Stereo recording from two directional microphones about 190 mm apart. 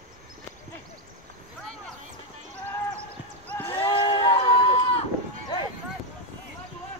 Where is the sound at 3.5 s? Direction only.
10° left (ahead or behind).